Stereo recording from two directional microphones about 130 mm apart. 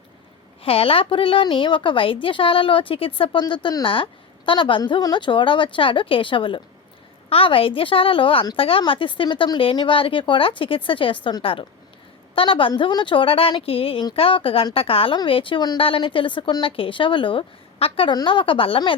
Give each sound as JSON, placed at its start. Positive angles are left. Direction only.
{"t": 0.6, "sound": "a woman's voice", "side_deg": 45}
{"t": 18.1, "sound": "a woman's voice", "side_deg": 35}